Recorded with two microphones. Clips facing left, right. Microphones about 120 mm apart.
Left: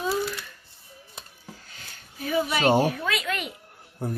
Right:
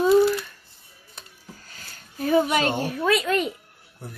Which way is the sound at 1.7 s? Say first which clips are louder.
Right 5 dB; 40° right (ahead or behind).